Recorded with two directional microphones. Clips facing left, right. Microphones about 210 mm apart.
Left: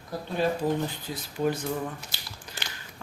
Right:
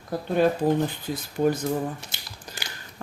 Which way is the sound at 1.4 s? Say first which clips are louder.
Right 4 dB; 50° right (ahead or behind).